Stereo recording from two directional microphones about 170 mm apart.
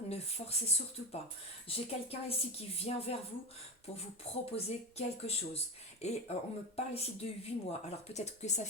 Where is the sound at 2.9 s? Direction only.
35° left (ahead or behind).